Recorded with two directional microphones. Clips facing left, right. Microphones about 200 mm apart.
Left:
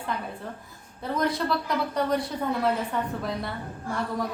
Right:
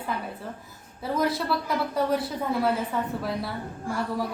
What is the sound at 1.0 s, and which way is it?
A woman's voice, 5° right (ahead or behind).